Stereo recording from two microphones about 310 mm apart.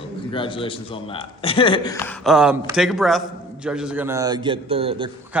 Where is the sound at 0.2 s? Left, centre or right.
Centre.